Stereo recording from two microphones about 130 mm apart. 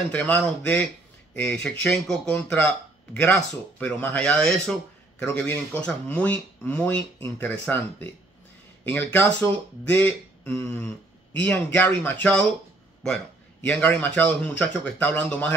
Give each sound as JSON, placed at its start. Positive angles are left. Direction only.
{"t": 0.1, "sound": "speech", "side_deg": 10}